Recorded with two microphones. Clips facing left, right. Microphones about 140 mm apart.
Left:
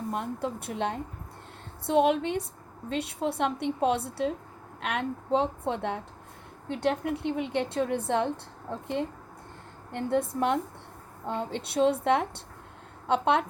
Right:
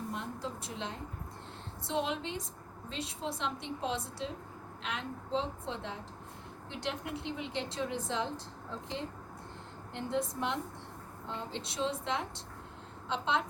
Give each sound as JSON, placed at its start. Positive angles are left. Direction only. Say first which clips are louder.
{"t": 0.1, "sound": "a woman's voice", "louder": "left 7 dB", "side_deg": 55}
{"t": 9.9, "sound": "a woman's voice", "louder": "left 7 dB", "side_deg": 55}